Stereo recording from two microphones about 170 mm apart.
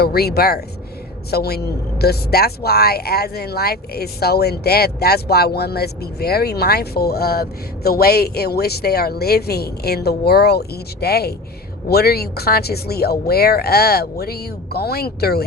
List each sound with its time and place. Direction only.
0.0 s speech: 65° left (ahead or behind)